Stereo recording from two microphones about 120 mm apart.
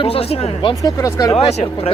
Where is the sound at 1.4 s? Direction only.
60° left (ahead or behind).